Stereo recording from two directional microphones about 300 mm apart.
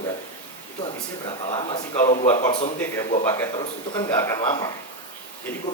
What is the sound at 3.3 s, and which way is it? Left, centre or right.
Speech, centre.